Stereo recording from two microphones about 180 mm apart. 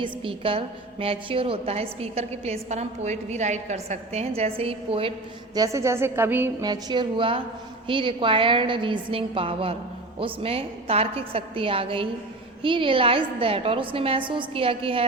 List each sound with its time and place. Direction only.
0.0 s a woman's voice: 30° right (ahead or behind)
5.5 s a woman's voice: 15° right (ahead or behind)